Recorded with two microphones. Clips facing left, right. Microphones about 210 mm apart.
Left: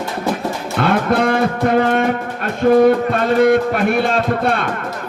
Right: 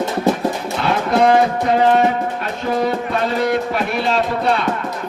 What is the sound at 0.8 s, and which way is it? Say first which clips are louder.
Speech: left 1 dB; 55° left (ahead or behind).